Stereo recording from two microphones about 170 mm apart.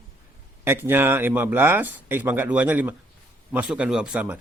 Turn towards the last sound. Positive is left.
turn(degrees=-5)  # may be behind; listen again after turning